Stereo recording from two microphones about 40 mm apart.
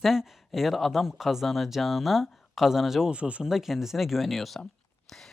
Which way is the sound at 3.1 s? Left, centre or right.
Right.